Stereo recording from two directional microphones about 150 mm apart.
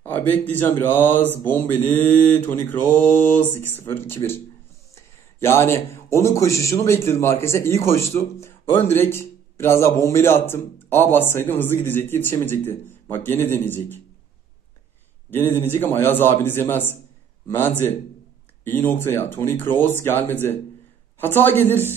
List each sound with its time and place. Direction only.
0.0 s speech: 15° left (ahead or behind)
5.4 s speech: 15° left (ahead or behind)
15.3 s speech: 15° left (ahead or behind)